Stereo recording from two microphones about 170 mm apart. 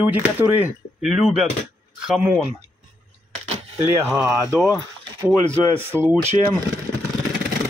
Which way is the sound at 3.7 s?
15° right (ahead or behind).